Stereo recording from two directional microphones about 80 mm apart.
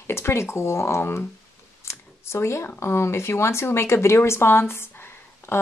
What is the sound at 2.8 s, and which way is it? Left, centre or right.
Speech, left.